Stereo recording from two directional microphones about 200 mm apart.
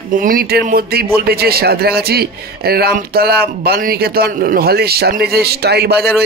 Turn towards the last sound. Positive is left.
turn(degrees=-55)  # may be behind; listen again after turning